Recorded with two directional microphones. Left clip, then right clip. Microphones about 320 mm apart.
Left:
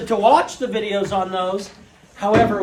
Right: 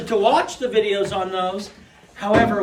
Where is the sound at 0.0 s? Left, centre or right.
Centre.